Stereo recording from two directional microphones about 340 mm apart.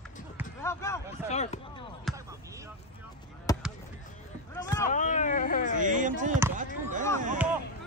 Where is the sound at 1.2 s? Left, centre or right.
Centre.